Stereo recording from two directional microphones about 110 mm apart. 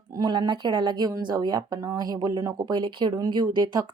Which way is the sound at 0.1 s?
40° right (ahead or behind).